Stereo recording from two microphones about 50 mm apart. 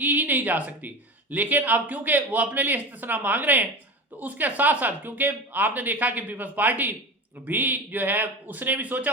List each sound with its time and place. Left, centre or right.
0.0 s speech: right